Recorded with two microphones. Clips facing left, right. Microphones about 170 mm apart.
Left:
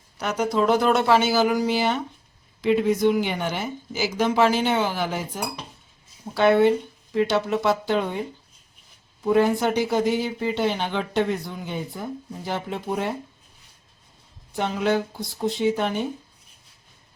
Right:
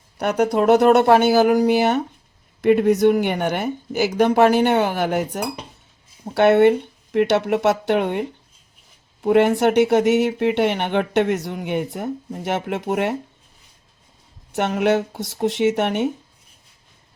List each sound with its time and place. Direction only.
0.2 s speech: 60° right (ahead or behind)
14.5 s speech: 70° right (ahead or behind)
15.1 s speech: 80° right